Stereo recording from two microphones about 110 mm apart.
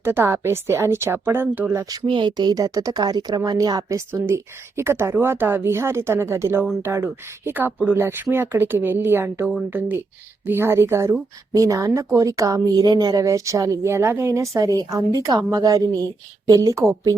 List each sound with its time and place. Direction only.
0.0 s speech: 20° right (ahead or behind)
1.9 s speech: 45° right (ahead or behind)